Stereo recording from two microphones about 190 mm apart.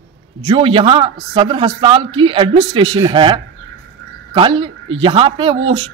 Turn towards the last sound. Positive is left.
turn(degrees=-30)  # may be behind; listen again after turning